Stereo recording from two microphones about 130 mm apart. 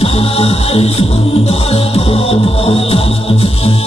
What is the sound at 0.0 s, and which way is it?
Music, 50° left (ahead or behind).